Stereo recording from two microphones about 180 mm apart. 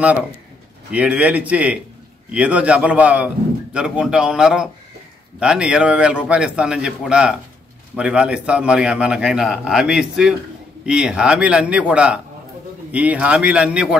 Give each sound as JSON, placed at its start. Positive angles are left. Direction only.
{"t": 0.9, "sound": "a man's voice", "side_deg": -5}